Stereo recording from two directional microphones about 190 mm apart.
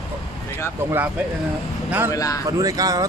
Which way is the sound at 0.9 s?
10° right (ahead or behind).